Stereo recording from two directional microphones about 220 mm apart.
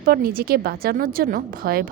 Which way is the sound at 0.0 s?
40° right (ahead or behind).